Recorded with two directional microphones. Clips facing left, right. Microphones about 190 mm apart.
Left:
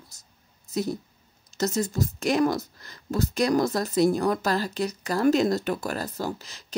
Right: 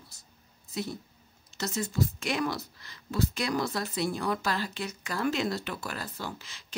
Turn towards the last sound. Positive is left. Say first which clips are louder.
# left 8 dB
turn(degrees=40)  # may be behind; listen again after turning